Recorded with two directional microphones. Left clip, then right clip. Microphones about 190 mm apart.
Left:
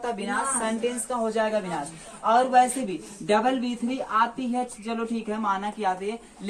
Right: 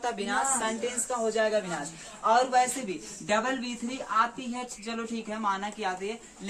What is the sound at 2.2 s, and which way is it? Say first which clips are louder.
Speech: left 4 dB; 20° right (ahead or behind).